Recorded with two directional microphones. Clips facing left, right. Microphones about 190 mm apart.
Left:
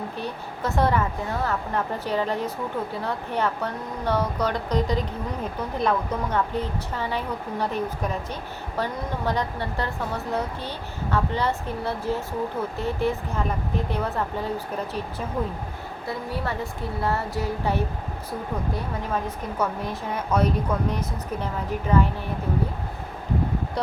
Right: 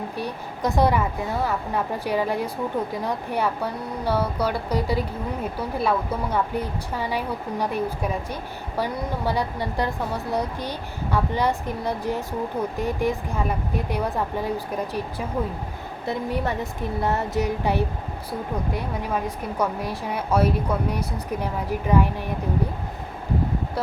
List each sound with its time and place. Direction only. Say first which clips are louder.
0.2 s a woman's voice: right 5 dB; 15° right (ahead or behind)
16.0 s a woman's voice: right 4 dB; 20° right (ahead or behind)